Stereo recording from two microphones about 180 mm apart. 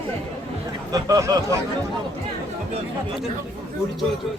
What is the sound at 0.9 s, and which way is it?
Speech, 20° right (ahead or behind).